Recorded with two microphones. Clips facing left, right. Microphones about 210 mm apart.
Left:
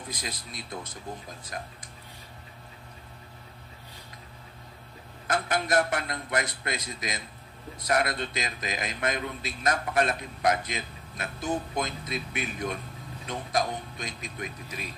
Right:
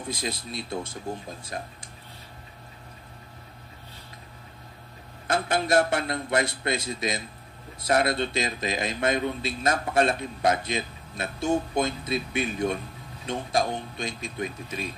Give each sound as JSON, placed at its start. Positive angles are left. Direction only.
{"t": 0.1, "sound": "a man's voice", "side_deg": -25}
{"t": 5.2, "sound": "a man's voice", "side_deg": -30}